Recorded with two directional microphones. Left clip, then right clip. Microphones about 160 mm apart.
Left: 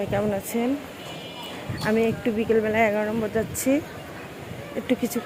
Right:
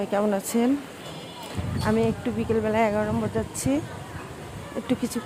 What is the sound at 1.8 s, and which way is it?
Speech, 5° right (ahead or behind).